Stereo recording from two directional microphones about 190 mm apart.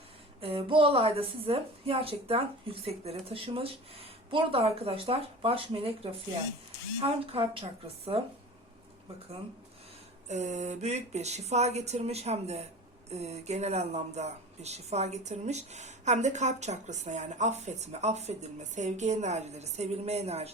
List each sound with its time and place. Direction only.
0.4 s speech: 30° right (ahead or behind)
10.2 s speech: 35° right (ahead or behind)